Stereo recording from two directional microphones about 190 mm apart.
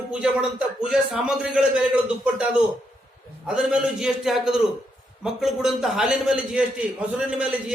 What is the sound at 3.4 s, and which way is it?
A man's voice, 5° right (ahead or behind).